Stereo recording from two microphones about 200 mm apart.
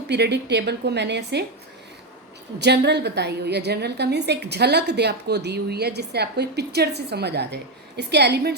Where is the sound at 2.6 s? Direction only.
55° right (ahead or behind).